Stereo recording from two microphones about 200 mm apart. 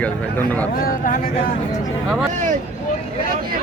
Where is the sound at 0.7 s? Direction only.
45° left (ahead or behind).